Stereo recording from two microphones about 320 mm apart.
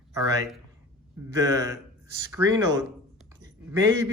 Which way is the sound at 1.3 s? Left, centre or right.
Centre.